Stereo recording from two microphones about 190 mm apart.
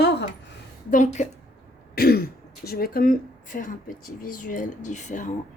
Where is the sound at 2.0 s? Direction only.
55° left (ahead or behind).